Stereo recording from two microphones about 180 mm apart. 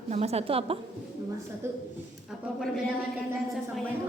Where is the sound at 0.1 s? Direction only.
35° right (ahead or behind).